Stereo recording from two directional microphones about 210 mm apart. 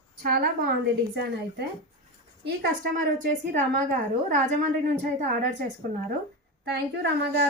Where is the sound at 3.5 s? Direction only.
35° right (ahead or behind).